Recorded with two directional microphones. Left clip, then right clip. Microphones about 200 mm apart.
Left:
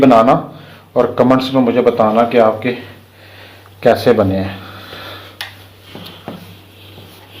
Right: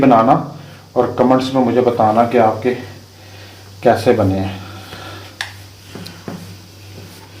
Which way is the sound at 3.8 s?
25° left (ahead or behind).